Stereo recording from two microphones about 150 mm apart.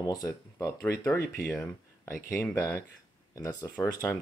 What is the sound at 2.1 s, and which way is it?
Speech, 70° left (ahead or behind).